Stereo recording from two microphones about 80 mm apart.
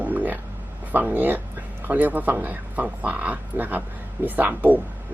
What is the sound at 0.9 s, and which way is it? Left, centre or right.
Speech, right.